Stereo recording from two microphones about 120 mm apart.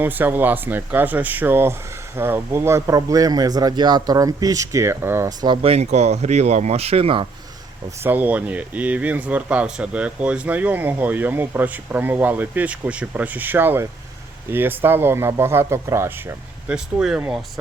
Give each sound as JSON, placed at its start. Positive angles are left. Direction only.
{"t": 0.0, "sound": "a man's voice", "side_deg": -15}
{"t": 5.6, "sound": "speech", "side_deg": -65}
{"t": 8.0, "sound": "speech", "side_deg": -15}
{"t": 16.7, "sound": "speech", "side_deg": -5}